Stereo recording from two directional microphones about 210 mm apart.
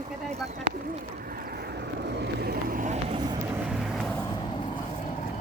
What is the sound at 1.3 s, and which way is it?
Vehicle, 45° right (ahead or behind).